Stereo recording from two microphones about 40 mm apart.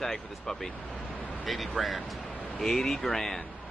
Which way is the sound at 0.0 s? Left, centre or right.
Centre.